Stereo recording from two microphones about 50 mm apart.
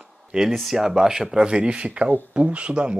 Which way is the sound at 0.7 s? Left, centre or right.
Centre.